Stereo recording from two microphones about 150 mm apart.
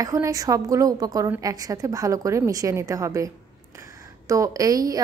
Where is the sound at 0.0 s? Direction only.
25° right (ahead or behind).